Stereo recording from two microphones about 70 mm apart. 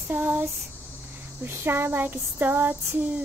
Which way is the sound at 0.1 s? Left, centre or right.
Right.